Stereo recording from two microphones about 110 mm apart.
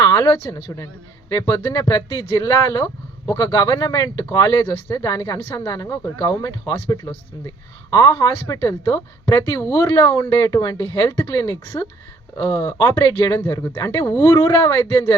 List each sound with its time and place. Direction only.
0.0 s speech: 30° left (ahead or behind)